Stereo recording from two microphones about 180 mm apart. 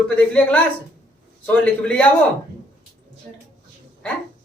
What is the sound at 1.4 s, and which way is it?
Speech, 10° left (ahead or behind).